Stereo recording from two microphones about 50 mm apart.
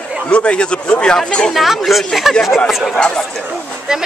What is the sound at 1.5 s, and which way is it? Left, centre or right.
Speech, centre.